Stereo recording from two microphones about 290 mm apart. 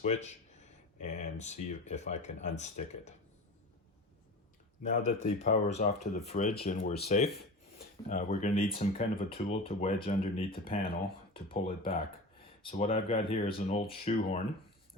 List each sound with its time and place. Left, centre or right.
0.0 s speech: left
4.8 s speech: left